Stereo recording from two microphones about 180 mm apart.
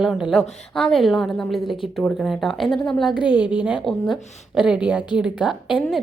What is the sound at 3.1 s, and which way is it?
Speech, 25° left (ahead or behind).